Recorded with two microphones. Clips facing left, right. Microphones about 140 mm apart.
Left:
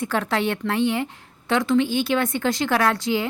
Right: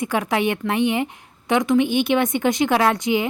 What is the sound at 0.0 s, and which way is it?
A woman's voice, 15° right (ahead or behind).